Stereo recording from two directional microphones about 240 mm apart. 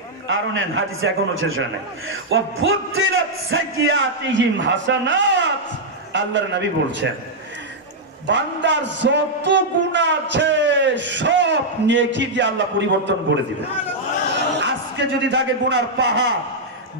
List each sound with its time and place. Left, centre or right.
0.3 s a man's voice: right
8.3 s a man's voice: right
14.3 s crowd: right
15.2 s a man's voice: right